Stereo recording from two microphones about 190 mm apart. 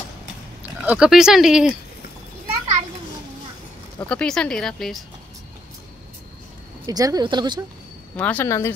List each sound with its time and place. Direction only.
0.8 s speech: 5° right (ahead or behind)
4.1 s speech: 5° left (ahead or behind)
6.9 s speech: 20° right (ahead or behind)
8.2 s speech: 10° left (ahead or behind)